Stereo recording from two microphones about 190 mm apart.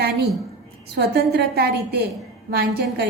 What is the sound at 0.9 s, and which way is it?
A woman's voice, 55° right (ahead or behind).